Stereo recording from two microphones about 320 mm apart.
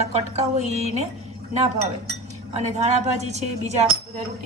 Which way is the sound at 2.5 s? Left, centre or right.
Centre.